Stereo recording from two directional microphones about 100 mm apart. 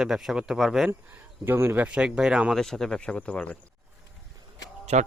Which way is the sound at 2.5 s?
5° left (ahead or behind).